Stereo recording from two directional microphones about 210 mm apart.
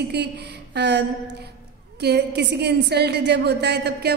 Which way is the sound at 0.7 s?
55° right (ahead or behind).